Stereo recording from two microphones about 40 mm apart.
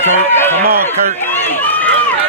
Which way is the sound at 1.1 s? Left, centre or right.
Left.